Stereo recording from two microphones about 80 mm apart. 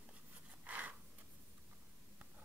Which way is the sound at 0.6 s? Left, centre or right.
Centre.